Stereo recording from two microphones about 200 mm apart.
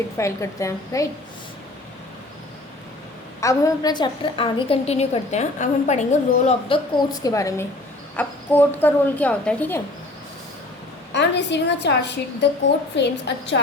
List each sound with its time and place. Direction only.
0.2 s a woman's voice: 15° left (ahead or behind)
3.4 s a woman's voice: 20° left (ahead or behind)
11.1 s a woman's voice: 60° left (ahead or behind)